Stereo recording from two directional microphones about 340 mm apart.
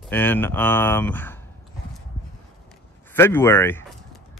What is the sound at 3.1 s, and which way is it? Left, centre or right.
Speech, centre.